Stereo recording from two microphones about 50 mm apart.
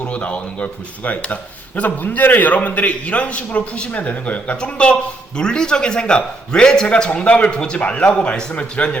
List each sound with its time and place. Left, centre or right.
0.0 s a man's voice: left